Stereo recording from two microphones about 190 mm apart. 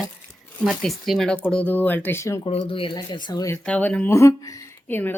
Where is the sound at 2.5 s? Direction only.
30° left (ahead or behind); by 5.1 s 10° left (ahead or behind).